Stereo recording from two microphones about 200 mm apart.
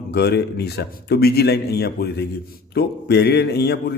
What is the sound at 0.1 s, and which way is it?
A man's voice, 55° left (ahead or behind).